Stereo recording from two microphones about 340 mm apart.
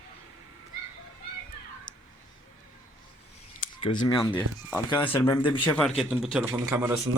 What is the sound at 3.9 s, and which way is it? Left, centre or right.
Speech, centre.